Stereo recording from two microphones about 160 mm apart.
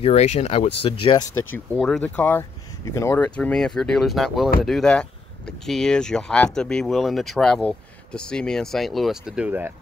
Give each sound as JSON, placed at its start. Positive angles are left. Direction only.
{"t": 0.0, "sound": "speech", "side_deg": 45}
{"t": 1.8, "sound": "speech", "side_deg": 5}